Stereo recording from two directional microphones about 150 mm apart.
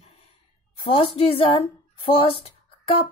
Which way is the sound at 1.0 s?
40° left (ahead or behind).